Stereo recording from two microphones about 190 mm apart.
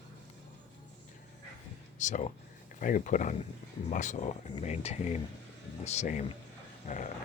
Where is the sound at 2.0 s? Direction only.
40° left (ahead or behind).